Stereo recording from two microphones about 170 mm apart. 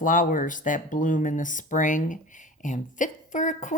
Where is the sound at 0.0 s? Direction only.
50° left (ahead or behind).